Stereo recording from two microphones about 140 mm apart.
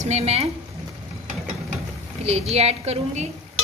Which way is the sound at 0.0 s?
50° right (ahead or behind).